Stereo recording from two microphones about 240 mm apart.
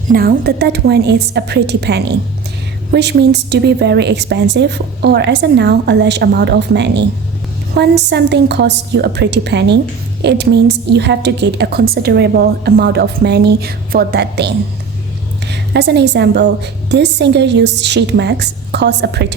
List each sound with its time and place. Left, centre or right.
0.1 s a woman's voice: right
15.7 s a woman's voice: right